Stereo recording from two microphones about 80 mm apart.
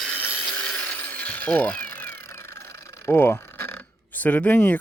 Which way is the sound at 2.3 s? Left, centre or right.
Left.